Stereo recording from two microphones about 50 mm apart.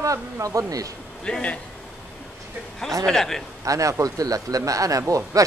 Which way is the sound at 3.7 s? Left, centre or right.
Right.